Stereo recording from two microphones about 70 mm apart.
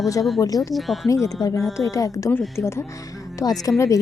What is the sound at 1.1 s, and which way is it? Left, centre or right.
Speech, left.